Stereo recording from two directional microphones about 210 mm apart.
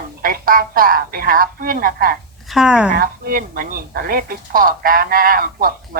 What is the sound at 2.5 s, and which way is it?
Speech, 5° right (ahead or behind).